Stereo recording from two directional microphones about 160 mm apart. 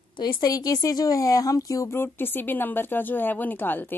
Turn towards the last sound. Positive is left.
turn(degrees=10)  # may be behind; listen again after turning